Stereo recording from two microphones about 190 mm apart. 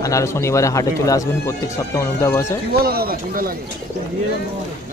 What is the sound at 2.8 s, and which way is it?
Speech, 55° right (ahead or behind).